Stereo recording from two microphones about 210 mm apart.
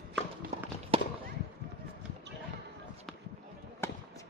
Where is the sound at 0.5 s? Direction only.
30° right (ahead or behind).